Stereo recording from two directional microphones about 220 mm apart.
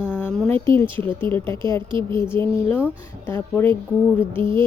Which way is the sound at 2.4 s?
10° left (ahead or behind).